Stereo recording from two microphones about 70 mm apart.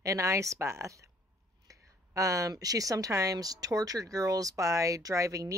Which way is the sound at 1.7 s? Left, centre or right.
Right.